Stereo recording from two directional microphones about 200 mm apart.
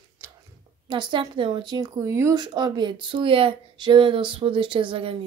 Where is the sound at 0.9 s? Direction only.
25° right (ahead or behind).